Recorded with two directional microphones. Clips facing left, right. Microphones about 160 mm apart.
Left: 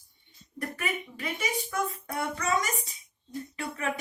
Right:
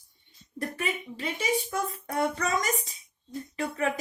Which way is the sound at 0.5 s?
30° right (ahead or behind).